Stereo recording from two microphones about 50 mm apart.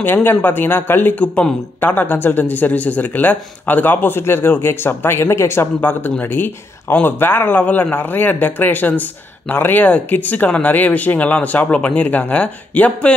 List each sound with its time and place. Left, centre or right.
0.0 s speech: left
1.2 s speech: left
1.8 s a woman's voice: left
5.8 s a woman's voice: left